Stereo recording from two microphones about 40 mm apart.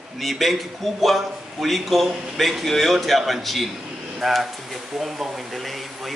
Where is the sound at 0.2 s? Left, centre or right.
Centre.